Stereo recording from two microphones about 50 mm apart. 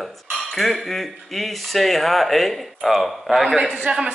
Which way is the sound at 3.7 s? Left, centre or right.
Right.